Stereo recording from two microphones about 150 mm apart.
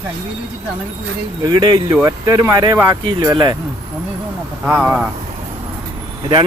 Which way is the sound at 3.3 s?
30° right (ahead or behind).